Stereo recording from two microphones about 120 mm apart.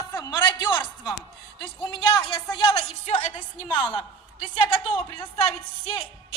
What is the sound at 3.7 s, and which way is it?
Speech, 40° left (ahead or behind).